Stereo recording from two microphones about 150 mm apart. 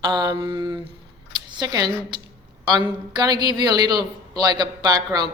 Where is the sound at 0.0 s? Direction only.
25° right (ahead or behind).